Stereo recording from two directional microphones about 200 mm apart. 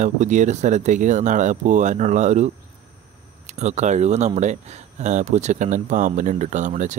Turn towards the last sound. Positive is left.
turn(degrees=-35)  # may be behind; listen again after turning